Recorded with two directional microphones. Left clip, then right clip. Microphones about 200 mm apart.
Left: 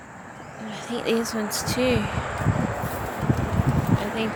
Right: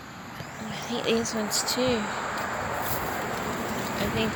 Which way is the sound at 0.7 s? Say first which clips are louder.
Left 2 dB; 25° left (ahead or behind).